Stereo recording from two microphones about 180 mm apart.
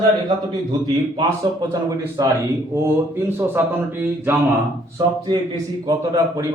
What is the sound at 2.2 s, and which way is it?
A man's voice, 20° right (ahead or behind).